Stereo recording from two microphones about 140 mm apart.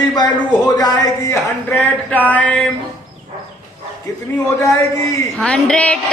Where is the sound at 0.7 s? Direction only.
25° left (ahead or behind).